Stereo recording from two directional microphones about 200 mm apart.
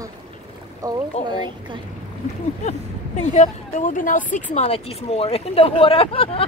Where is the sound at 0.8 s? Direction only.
15° right (ahead or behind).